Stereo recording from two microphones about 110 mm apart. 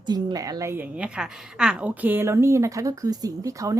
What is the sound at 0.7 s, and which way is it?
A woman's voice, 15° right (ahead or behind).